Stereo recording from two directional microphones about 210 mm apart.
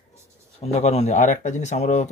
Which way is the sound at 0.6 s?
30° left (ahead or behind).